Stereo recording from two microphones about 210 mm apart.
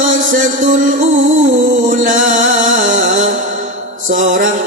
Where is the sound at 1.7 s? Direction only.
40° right (ahead or behind).